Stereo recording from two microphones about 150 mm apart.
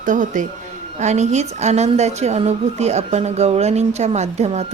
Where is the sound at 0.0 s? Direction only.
60° right (ahead or behind).